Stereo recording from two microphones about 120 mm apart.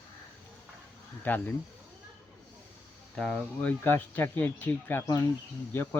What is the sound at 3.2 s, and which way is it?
Speech, 5° left (ahead or behind).